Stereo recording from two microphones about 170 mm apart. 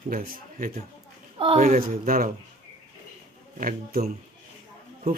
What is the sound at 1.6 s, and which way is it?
Speech, 55° right (ahead or behind).